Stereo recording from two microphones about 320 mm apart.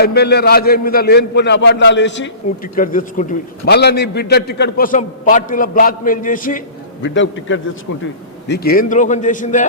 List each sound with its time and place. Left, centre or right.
0.0 s a man's voice: left